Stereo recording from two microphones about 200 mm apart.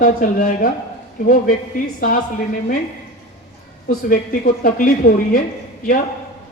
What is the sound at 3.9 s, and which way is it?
A woman's voice, 45° left (ahead or behind).